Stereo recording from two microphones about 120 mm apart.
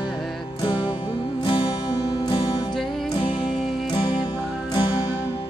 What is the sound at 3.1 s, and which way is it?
Music, 45° left (ahead or behind).